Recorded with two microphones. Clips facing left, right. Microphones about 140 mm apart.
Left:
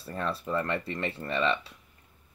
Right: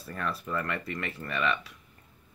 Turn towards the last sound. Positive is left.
turn(degrees=30)  # may be behind; listen again after turning